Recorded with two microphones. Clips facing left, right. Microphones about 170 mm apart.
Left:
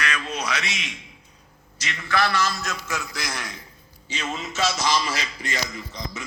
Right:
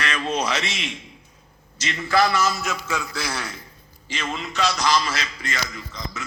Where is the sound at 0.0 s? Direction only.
30° right (ahead or behind).